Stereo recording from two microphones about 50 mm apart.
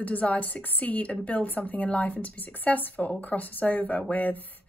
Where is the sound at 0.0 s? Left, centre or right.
Left.